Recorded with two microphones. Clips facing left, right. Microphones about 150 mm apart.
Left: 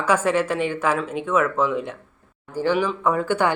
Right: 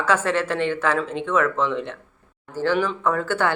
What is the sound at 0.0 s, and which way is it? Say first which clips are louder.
Speech: left 1 dB; 10° left (ahead or behind).